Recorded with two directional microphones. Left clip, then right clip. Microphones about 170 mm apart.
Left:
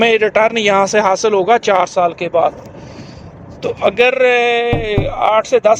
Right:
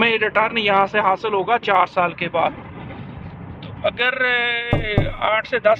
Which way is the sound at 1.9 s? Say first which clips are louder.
Left 6 dB; 10° left (ahead or behind).